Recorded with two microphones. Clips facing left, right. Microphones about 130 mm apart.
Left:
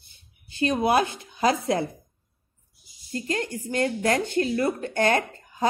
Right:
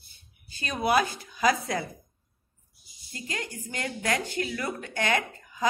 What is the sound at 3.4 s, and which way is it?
Speech, 25° left (ahead or behind).